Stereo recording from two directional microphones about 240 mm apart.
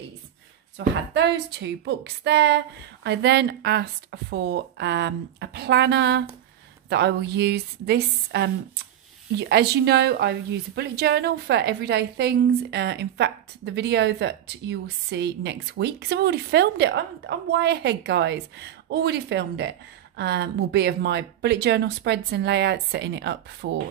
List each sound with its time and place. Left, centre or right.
0.7 s a woman's voice: right